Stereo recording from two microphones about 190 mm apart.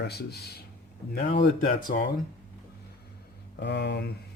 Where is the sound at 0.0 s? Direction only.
60° left (ahead or behind).